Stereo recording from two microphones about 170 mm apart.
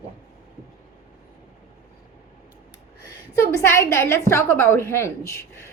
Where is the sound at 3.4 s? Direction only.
15° left (ahead or behind).